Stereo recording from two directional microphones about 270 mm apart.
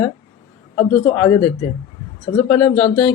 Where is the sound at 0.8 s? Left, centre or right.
Centre.